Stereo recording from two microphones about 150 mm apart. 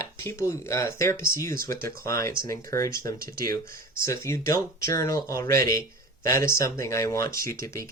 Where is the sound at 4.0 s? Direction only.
20° left (ahead or behind).